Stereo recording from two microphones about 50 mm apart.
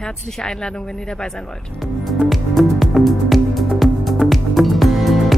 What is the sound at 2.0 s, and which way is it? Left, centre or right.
Music, centre.